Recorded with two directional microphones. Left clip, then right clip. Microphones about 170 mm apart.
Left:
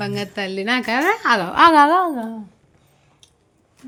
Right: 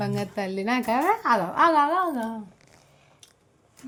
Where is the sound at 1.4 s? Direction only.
30° left (ahead or behind).